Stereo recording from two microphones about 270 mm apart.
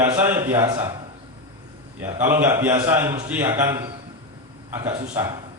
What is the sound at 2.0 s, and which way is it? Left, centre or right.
A man's voice, centre.